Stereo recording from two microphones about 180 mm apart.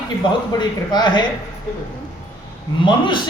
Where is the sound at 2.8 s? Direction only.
25° left (ahead or behind).